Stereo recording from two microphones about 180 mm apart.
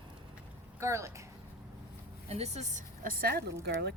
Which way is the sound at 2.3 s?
35° right (ahead or behind).